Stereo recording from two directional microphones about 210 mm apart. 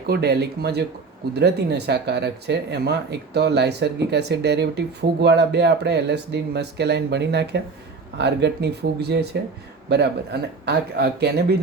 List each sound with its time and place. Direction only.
0.1 s speech: 50° right (ahead or behind)